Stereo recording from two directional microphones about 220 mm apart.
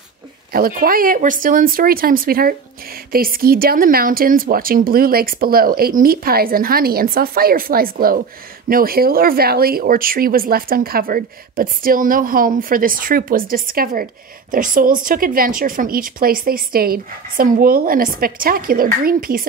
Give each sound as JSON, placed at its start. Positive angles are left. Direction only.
{"t": 0.5, "sound": "a woman's voice", "side_deg": -40}